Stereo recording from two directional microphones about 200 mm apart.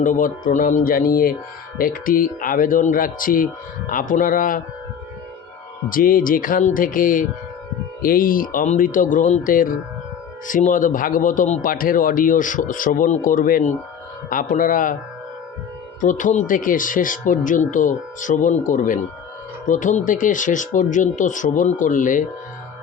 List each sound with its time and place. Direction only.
0.0 s speech: 40° left (ahead or behind)
5.9 s speech: 45° left (ahead or behind)
16.0 s speech: 40° left (ahead or behind)